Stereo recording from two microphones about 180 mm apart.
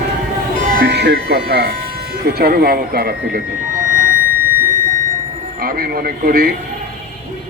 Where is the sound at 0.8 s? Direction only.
70° right (ahead or behind).